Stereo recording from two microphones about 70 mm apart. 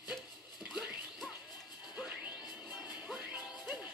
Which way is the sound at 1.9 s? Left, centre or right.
Centre.